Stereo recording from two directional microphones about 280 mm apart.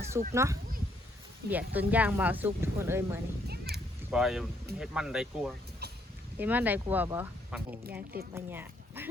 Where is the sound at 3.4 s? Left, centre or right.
Right.